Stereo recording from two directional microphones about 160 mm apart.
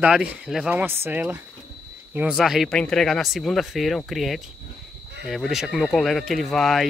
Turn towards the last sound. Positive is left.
turn(degrees=0)  # may be behind; listen again after turning